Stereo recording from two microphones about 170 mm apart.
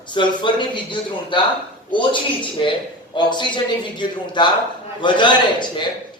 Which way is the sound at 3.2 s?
25° left (ahead or behind).